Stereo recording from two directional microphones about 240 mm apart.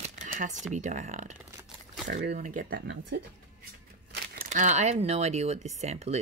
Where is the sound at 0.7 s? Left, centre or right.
Right.